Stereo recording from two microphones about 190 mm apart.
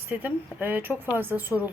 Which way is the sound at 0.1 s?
10° right (ahead or behind).